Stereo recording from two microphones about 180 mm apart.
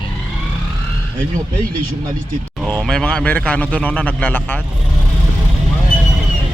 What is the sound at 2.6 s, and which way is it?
Speech, 5° left (ahead or behind).